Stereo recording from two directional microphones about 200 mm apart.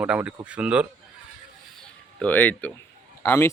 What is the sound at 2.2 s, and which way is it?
Speech, 10° left (ahead or behind).